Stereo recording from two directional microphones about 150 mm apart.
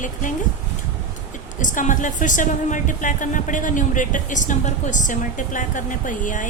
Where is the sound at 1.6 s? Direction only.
60° left (ahead or behind).